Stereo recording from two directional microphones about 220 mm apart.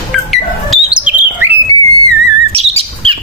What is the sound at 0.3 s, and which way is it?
Bird, 5° right (ahead or behind).